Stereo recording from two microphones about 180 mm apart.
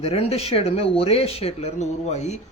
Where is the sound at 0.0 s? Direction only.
35° left (ahead or behind).